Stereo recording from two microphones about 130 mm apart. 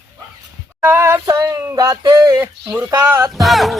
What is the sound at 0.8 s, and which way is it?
Speech, 20° right (ahead or behind).